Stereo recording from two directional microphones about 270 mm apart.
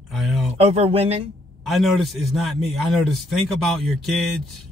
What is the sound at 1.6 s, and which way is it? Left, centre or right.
A man's voice, centre.